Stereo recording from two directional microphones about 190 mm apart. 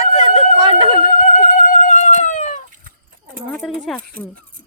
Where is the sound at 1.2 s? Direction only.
45° left (ahead or behind).